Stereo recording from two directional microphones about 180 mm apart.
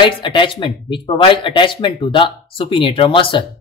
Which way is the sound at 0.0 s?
25° left (ahead or behind).